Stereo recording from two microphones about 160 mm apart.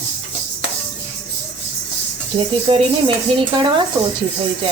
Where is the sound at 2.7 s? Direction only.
30° right (ahead or behind).